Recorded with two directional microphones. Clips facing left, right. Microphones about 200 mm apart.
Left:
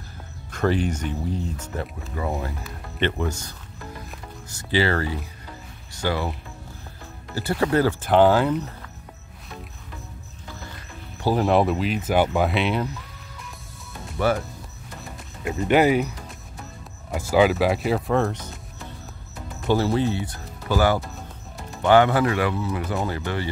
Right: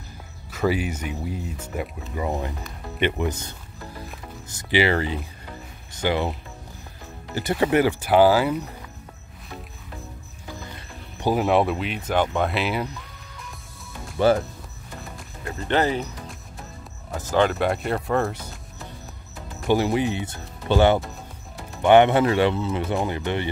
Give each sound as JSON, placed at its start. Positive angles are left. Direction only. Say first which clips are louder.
{"t": 0.5, "sound": "speech", "louder": "left 1 dB", "side_deg": -5}
{"t": 7.3, "sound": "speech", "louder": "right 1 dB", "side_deg": -20}
{"t": 11.3, "sound": "speech", "louder": "left 1 dB", "side_deg": 0}
{"t": 14.1, "sound": "speech", "louder": "right 4 dB", "side_deg": -30}
{"t": 15.4, "sound": "speech", "louder": "left 4 dB", "side_deg": 10}
{"t": 17.1, "sound": "speech", "louder": "left 3 dB", "side_deg": 10}
{"t": 19.7, "sound": "speech", "louder": "even", "side_deg": -15}